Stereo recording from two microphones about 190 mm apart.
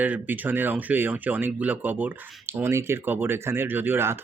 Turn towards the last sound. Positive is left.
turn(degrees=-10)  # may be behind; listen again after turning